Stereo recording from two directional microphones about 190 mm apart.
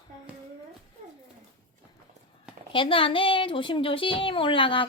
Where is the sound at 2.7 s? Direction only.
25° left (ahead or behind).